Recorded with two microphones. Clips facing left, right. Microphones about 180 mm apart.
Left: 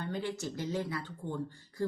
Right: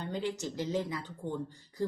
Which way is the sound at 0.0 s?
20° right (ahead or behind).